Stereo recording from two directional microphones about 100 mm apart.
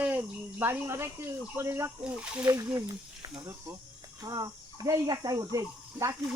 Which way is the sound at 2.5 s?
30° right (ahead or behind).